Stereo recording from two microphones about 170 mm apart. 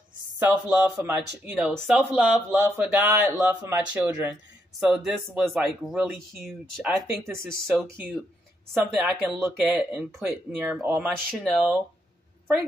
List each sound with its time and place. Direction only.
0.4 s speech: 10° right (ahead or behind)
1.7 s speech: 5° left (ahead or behind)
2.0 s speech: 10° right (ahead or behind)
3.1 s speech: 15° right (ahead or behind)
4.7 s speech: 5° right (ahead or behind)
9.0 s speech: 10° right (ahead or behind)